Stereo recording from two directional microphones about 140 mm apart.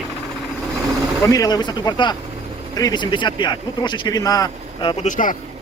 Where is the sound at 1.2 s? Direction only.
25° left (ahead or behind).